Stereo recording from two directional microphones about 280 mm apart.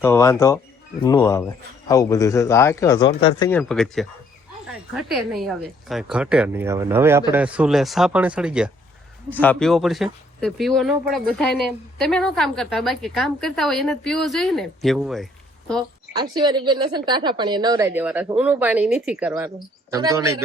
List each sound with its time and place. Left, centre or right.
0.0 s speech: centre
3.6 s speech: centre
16.1 s speech: centre